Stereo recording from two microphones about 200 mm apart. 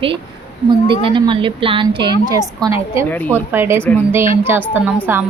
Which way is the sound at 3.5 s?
10° right (ahead or behind).